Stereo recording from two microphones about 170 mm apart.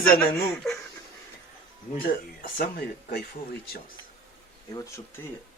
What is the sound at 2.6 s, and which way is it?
Speech, 65° left (ahead or behind).